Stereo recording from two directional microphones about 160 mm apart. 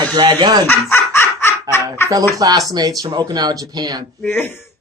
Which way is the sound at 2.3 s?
20° right (ahead or behind).